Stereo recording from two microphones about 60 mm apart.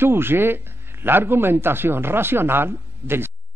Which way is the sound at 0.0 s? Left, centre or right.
Right.